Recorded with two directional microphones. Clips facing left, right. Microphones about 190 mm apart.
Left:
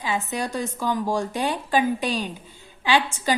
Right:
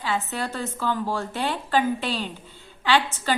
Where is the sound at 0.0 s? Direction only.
15° left (ahead or behind).